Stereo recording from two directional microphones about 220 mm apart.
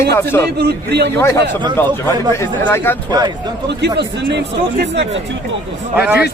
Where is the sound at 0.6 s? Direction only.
50° right (ahead or behind).